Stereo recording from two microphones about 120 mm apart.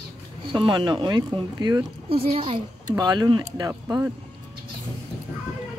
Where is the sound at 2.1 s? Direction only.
55° right (ahead or behind).